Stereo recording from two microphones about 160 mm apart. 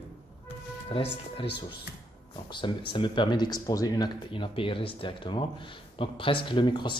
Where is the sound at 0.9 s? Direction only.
35° left (ahead or behind).